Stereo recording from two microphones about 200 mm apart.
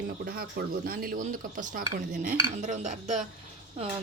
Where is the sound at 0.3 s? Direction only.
50° right (ahead or behind).